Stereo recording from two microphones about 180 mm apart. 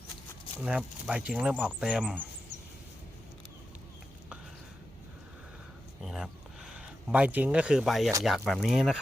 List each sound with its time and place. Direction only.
0.6 s speech: 5° right (ahead or behind)
6.0 s a sound: centre (ahead or behind)
8.2 s speech: centre (ahead or behind)